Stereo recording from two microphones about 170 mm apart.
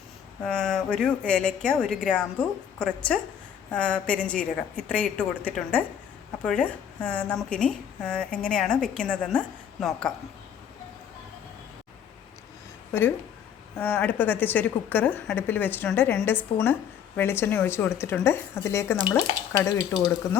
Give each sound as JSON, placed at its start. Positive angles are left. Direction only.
{"t": 0.4, "sound": "a woman's voice", "side_deg": 5}
{"t": 12.9, "sound": "a woman's voice", "side_deg": 15}